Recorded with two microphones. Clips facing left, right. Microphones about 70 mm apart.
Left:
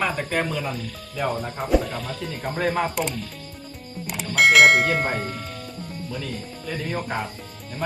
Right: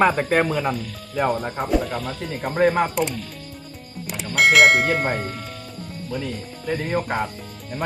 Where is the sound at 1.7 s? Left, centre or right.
Centre.